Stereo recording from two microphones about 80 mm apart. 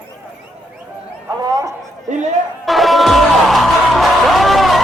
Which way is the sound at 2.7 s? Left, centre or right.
Centre.